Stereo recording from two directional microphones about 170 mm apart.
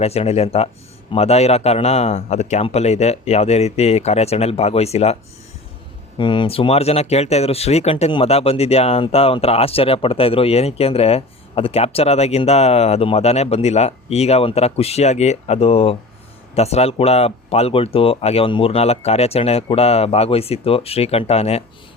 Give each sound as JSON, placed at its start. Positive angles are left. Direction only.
{"t": 0.0, "sound": "speech", "side_deg": 35}
{"t": 6.1, "sound": "speech", "side_deg": 30}